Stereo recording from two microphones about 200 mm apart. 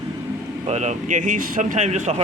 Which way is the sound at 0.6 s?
35° right (ahead or behind).